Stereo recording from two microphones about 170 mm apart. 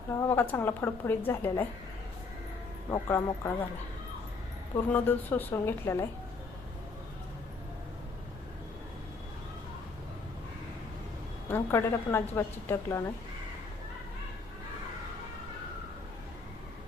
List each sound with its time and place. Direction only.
0.2 s a woman's voice: 15° left (ahead or behind)
2.9 s a woman's voice: 20° left (ahead or behind)
4.9 s a woman's voice: 10° left (ahead or behind)
11.4 s a woman's voice: 15° left (ahead or behind)